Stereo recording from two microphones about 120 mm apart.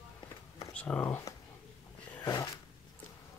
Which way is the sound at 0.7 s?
10° left (ahead or behind).